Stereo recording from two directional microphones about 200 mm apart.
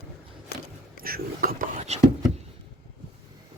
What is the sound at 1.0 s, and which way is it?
Speech, 45° right (ahead or behind).